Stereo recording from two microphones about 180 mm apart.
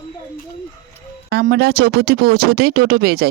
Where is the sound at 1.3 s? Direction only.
65° right (ahead or behind).